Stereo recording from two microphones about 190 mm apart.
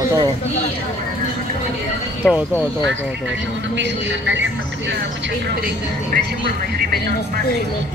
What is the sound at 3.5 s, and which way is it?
A woman's voice, 70° right (ahead or behind).